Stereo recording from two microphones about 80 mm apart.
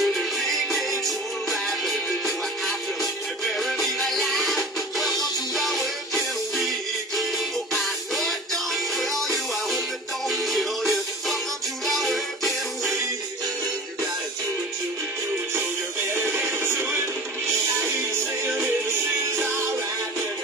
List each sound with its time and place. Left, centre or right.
0.0 s music: centre
16.2 s synthetic singing: right